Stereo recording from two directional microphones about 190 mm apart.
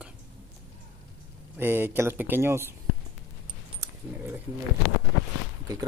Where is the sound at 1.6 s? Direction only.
10° right (ahead or behind).